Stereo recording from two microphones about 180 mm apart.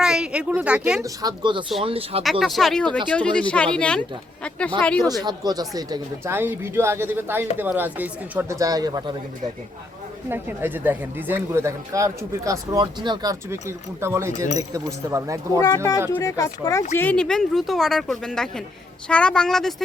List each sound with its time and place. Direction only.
0.0 s speech: 5° right (ahead or behind)
1.0 s speech: 20° right (ahead or behind)
2.4 s speech: centre (ahead or behind)
5.2 s speech: 25° right (ahead or behind)
10.2 s speech: 10° right (ahead or behind)
14.3 s speech: 45° left (ahead or behind)
14.7 s speech: 15° right (ahead or behind)
15.6 s speech: 20° left (ahead or behind)
17.0 s speech: 5° left (ahead or behind)